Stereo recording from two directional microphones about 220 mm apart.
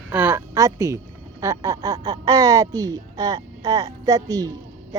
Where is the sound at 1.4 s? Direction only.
15° right (ahead or behind).